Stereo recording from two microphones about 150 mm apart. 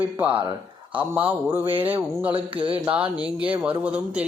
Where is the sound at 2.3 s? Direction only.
35° right (ahead or behind).